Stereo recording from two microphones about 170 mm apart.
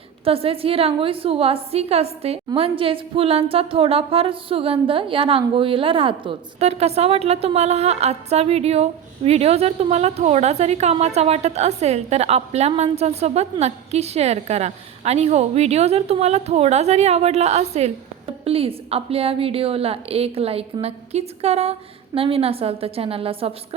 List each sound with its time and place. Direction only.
0.3 s speech: 35° right (ahead or behind)